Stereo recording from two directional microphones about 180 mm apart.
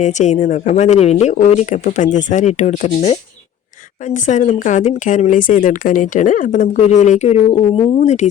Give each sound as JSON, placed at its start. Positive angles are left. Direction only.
{"t": 0.0, "sound": "speech", "side_deg": 40}